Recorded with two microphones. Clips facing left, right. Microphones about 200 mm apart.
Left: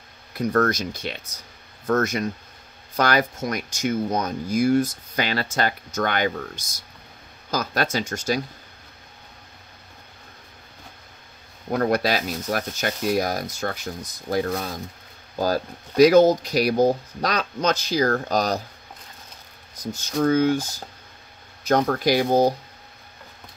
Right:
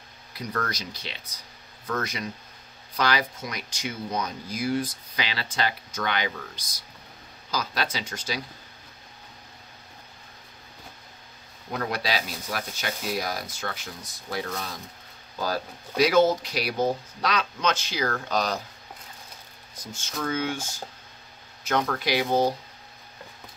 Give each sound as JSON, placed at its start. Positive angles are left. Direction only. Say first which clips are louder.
{"t": 0.3, "sound": "speech", "louder": "left 10 dB", "side_deg": 50}
{"t": 11.7, "sound": "speech", "louder": "left 7 dB", "side_deg": 50}
{"t": 19.8, "sound": "speech", "louder": "left 10 dB", "side_deg": 40}